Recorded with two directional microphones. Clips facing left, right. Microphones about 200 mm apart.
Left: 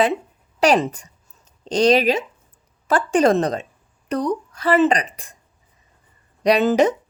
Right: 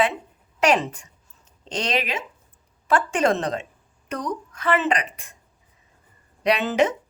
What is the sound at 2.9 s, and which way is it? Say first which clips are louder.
A woman's voice: left 4 dB; 35° left (ahead or behind).